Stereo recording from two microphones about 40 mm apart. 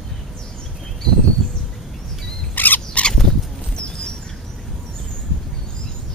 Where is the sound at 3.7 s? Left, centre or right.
Left.